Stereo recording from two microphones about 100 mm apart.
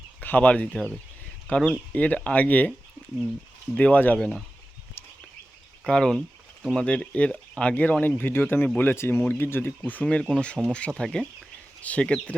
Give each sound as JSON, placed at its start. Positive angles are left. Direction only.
{"t": 0.2, "sound": "speech", "side_deg": 15}
{"t": 3.8, "sound": "speech", "side_deg": 15}
{"t": 5.8, "sound": "speech", "side_deg": 5}